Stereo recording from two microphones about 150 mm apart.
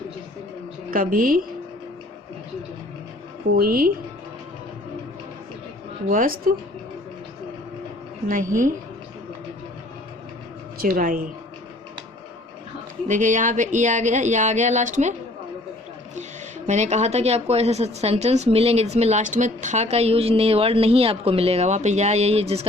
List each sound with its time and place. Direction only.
0.9 s speech: 70° right (ahead or behind)
3.5 s speech: 80° right
6.1 s speech: 70° right (ahead or behind)
8.3 s speech: 65° right (ahead or behind)
10.8 s speech: 65° right (ahead or behind)
13.1 s speech: 55° right (ahead or behind)
16.6 s speech: 50° right (ahead or behind)